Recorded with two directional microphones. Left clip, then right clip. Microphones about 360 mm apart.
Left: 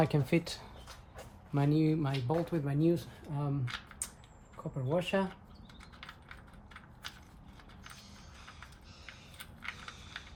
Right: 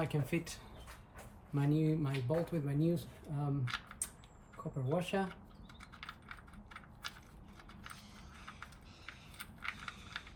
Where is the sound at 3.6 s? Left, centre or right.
Centre.